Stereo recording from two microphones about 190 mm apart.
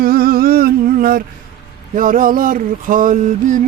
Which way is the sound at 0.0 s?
50° right (ahead or behind).